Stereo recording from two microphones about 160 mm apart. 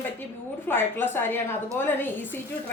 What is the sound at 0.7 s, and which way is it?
A woman's voice, 15° left (ahead or behind).